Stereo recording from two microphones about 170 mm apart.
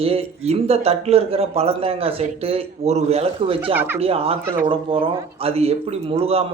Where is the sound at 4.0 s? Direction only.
35° right (ahead or behind).